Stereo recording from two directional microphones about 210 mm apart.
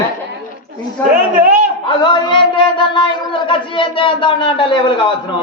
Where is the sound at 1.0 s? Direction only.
10° left (ahead or behind).